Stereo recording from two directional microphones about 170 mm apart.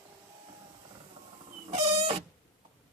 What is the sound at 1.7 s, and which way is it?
Pig, 35° right (ahead or behind).